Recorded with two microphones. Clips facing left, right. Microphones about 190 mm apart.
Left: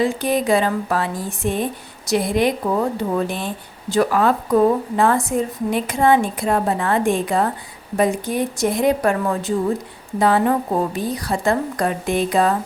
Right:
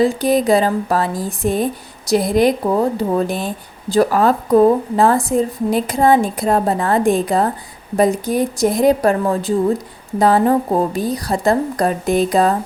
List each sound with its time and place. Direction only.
0.0 s speech: 35° right (ahead or behind)